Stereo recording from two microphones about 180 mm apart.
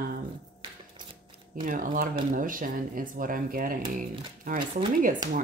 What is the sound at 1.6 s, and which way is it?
Speech, 50° right (ahead or behind).